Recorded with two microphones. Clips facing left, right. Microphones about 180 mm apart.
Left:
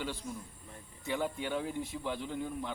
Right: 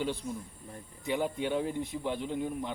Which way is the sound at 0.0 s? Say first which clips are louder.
Right 5 dB; 20° right (ahead or behind).